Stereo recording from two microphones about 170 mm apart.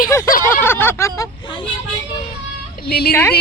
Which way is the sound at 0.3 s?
55° left (ahead or behind).